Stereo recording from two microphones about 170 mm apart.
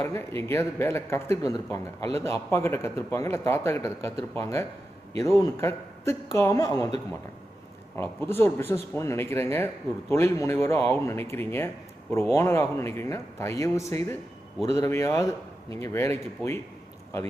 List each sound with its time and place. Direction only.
0.0 s speech: 15° left (ahead or behind)
7.9 s speech: 15° left (ahead or behind)